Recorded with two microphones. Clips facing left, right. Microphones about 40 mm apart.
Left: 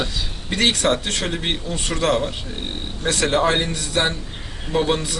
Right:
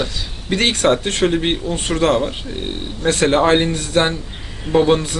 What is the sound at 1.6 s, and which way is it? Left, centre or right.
Speech, right.